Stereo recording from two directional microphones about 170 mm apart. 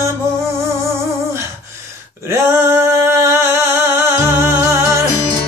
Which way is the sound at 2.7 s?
15° right (ahead or behind).